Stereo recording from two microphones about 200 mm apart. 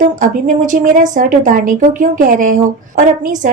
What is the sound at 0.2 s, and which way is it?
A woman's voice, 40° right (ahead or behind).